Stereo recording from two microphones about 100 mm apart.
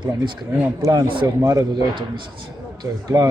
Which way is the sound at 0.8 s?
35° right (ahead or behind).